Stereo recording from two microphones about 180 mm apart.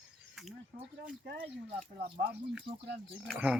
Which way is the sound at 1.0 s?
55° right (ahead or behind).